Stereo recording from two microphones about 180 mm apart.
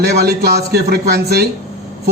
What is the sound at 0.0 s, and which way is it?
A man's voice, 60° right (ahead or behind).